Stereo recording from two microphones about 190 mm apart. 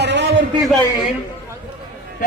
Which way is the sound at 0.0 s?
65° right (ahead or behind).